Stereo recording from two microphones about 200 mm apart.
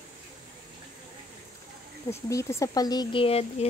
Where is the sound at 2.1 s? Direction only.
15° left (ahead or behind).